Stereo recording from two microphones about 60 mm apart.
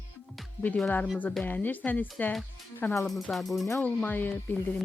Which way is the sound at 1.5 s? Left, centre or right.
Left.